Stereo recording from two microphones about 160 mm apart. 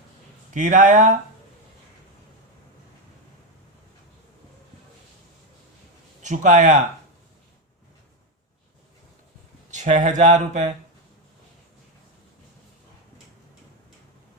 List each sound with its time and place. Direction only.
0.5 s speech: 55° right (ahead or behind)
6.2 s speech: 50° right (ahead or behind)
9.6 s speech: 50° right (ahead or behind)